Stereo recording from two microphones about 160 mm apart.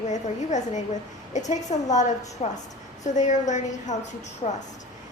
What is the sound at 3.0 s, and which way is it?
Speech, 50° left (ahead or behind).